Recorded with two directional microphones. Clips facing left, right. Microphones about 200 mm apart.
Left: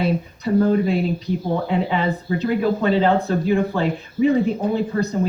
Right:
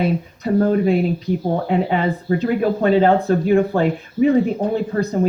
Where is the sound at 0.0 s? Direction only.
50° right (ahead or behind).